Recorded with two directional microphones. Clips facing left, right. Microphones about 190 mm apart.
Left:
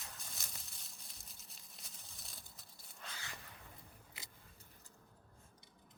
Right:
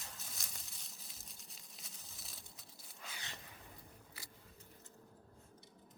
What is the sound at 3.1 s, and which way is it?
Dog, 20° right (ahead or behind).